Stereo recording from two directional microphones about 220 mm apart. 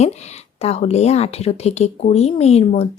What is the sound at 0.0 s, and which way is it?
Speech, 30° left (ahead or behind).